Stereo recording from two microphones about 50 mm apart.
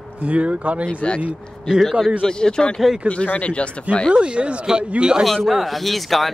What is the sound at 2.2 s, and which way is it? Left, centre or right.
Speech, centre.